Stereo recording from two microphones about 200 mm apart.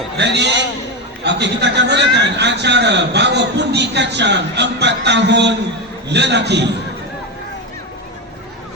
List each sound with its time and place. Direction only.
0.2 s a man's voice: 60° right (ahead or behind)